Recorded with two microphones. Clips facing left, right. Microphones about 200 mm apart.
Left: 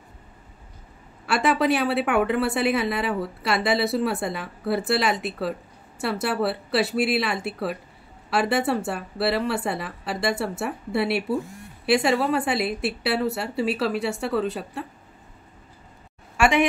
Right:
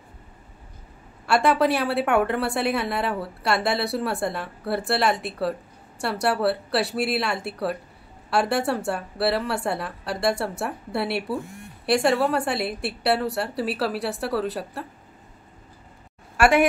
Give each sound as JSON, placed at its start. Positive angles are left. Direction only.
{"t": 1.2, "sound": "a woman's voice", "side_deg": 0}
{"t": 16.3, "sound": "a woman's voice", "side_deg": -5}